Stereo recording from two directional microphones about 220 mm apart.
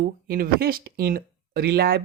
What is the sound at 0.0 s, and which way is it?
Speech, 40° right (ahead or behind).